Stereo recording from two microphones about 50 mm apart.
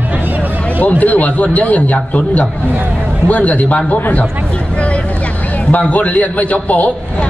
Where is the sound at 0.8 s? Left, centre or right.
Left.